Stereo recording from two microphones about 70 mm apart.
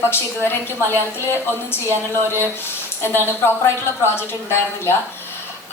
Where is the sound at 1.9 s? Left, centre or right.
Right.